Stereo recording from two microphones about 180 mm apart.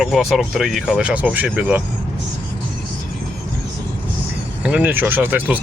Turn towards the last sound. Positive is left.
turn(degrees=-10)  # may be behind; listen again after turning